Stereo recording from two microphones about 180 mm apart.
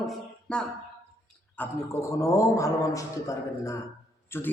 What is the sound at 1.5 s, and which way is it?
A man's voice, 15° left (ahead or behind).